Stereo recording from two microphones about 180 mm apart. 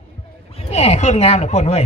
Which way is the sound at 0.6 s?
35° left (ahead or behind).